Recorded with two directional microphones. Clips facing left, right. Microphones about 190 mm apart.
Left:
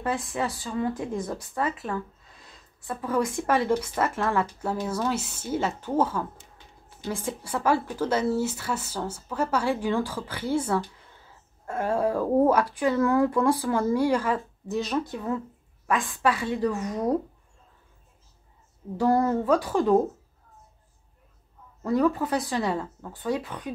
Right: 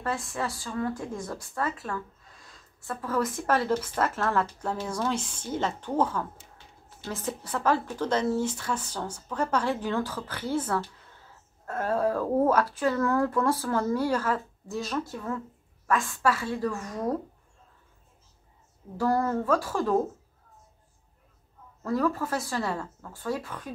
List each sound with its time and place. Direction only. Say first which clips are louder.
0.6 s a woman's voice: left 3 dB; 20° left (ahead or behind)
18.9 s speech: left 3 dB; 20° left (ahead or behind)
21.8 s a woman's voice: left 4 dB; 20° left (ahead or behind)